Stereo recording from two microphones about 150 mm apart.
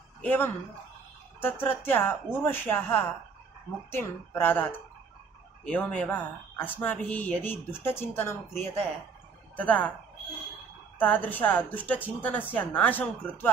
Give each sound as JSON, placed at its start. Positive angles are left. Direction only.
{"t": 0.2, "sound": "speech", "side_deg": 10}
{"t": 11.0, "sound": "speech", "side_deg": 10}